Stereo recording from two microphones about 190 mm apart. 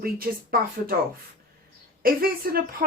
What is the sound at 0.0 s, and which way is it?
Speech, 50° right (ahead or behind).